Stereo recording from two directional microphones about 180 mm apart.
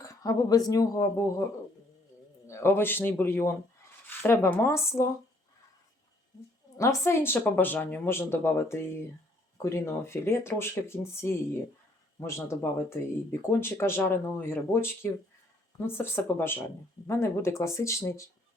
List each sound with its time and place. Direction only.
0.0 s speech: 20° left (ahead or behind)
2.5 s speech: 15° left (ahead or behind)
6.7 s speech: 15° left (ahead or behind)